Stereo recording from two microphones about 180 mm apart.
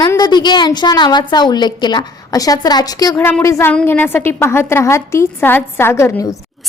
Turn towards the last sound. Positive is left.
turn(degrees=15)  # may be behind; listen again after turning